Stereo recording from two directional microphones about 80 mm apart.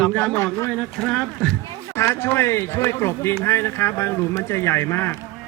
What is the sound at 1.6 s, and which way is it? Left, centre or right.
Speech, left.